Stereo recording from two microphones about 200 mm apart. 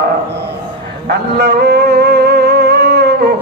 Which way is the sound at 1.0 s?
55° right (ahead or behind).